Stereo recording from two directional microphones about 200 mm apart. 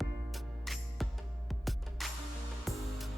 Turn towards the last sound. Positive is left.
turn(degrees=0)  # may be behind; listen again after turning